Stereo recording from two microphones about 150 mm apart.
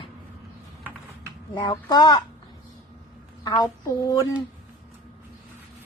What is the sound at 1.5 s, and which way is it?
Speech, 30° left (ahead or behind).